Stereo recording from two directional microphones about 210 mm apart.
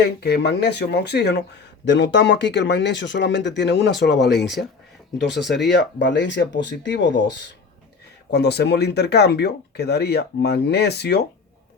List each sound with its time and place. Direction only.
0.2 s speech: 50° left (ahead or behind)
8.3 s speech: 50° left (ahead or behind)